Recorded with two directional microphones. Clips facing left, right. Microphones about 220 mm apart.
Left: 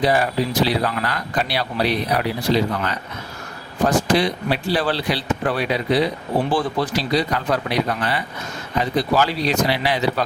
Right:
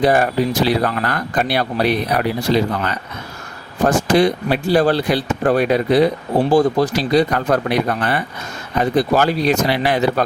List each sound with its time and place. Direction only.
0.0 s speech: 50° right (ahead or behind)
3.8 s speech: 50° right (ahead or behind)